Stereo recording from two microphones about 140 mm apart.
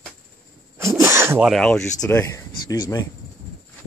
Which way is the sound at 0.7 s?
20° right (ahead or behind).